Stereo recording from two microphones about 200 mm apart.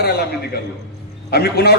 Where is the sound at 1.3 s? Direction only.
55° left (ahead or behind).